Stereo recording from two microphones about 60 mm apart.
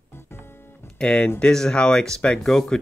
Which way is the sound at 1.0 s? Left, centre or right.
Centre.